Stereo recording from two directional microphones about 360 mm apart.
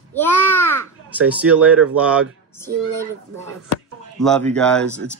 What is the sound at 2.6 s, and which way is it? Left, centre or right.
Speech, centre.